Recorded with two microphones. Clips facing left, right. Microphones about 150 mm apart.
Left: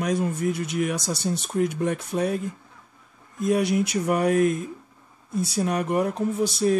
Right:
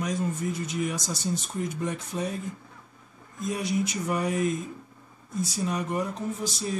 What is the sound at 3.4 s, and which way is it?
Speech, 65° left (ahead or behind).